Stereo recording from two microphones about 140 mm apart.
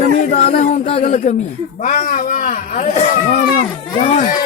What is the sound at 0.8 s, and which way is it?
Speech, 45° left (ahead or behind).